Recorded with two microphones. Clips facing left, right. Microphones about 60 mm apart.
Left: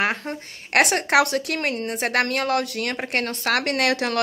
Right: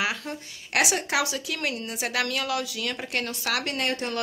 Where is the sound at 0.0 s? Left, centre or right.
Left.